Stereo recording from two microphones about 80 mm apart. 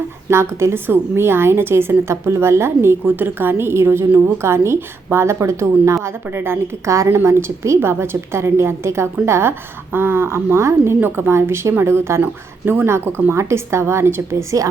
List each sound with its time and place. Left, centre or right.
0.3 s a woman's voice: right